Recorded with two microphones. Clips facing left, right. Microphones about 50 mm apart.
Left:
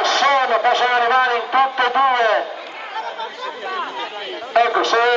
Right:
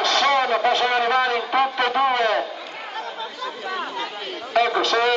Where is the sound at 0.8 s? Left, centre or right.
Left.